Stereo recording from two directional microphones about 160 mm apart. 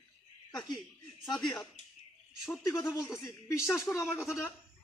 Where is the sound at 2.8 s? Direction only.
20° left (ahead or behind).